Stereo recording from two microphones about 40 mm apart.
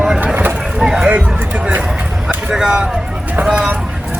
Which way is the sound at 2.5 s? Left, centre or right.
Centre.